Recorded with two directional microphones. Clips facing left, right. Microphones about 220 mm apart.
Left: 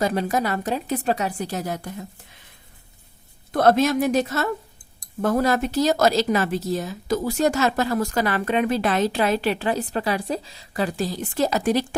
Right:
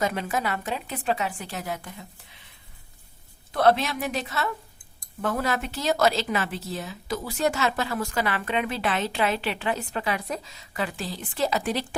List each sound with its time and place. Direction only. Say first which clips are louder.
0.0 s speech: left 5 dB; 35° left (ahead or behind)
3.5 s a woman's voice: left 4 dB; 45° left (ahead or behind)